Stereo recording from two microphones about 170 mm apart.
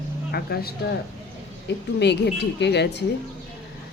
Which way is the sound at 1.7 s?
90° left.